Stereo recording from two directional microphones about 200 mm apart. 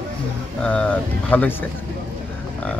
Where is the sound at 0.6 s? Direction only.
5° left (ahead or behind).